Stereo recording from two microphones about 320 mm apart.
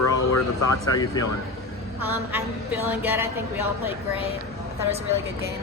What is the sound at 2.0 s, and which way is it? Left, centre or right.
A woman's voice, centre.